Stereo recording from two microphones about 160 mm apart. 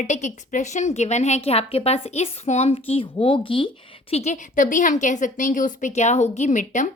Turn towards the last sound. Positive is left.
turn(degrees=50)  # may be behind; listen again after turning